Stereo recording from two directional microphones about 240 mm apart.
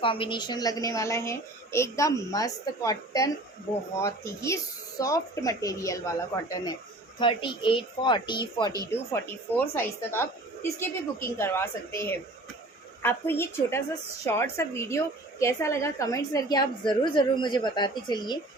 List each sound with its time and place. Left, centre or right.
0.0 s a woman's voice: left